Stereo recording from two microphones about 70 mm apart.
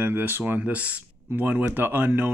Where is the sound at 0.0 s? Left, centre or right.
Right.